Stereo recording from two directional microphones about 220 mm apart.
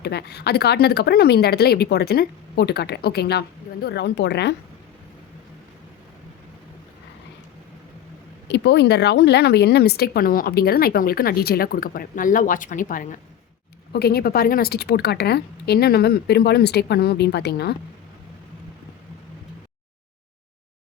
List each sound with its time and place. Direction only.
0.0 s a woman's voice: 45° left (ahead or behind)
8.4 s a woman's voice: 50° left (ahead or behind)